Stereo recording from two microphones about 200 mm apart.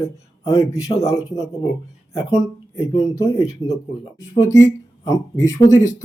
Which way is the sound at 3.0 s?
15° left (ahead or behind).